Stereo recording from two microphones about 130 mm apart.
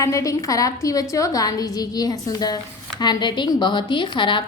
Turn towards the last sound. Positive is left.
turn(degrees=40)  # may be behind; listen again after turning